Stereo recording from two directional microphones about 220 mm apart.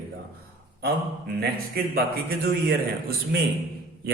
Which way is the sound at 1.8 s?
45° right (ahead or behind).